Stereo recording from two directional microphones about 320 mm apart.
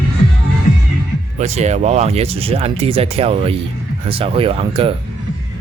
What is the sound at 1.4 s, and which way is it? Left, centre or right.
Speech, right.